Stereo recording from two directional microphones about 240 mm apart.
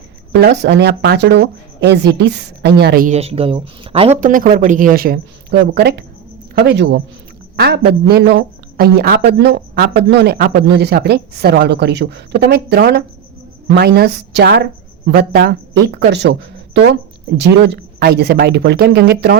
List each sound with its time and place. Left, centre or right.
0.3 s a woman's voice: right